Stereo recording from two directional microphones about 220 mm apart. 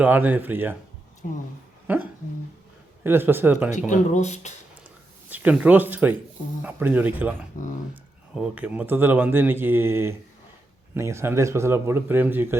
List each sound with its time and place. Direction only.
0.0 s speech: 5° right (ahead or behind)
3.0 s speech: 10° right (ahead or behind)
3.7 s speech: 35° left (ahead or behind)
5.3 s speech: 5° right (ahead or behind)
8.4 s speech: 5° right (ahead or behind)